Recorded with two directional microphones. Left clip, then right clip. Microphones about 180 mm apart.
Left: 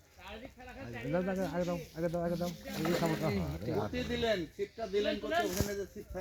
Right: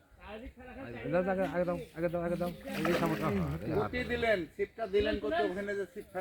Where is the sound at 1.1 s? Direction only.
50° left (ahead or behind).